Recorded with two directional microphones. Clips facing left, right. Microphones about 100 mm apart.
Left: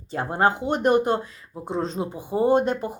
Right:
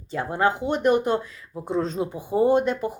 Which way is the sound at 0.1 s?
40° left (ahead or behind).